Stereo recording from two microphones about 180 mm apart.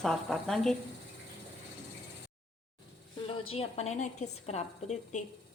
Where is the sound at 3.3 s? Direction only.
35° left (ahead or behind).